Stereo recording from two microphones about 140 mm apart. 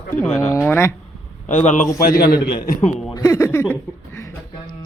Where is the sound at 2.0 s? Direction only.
90° left.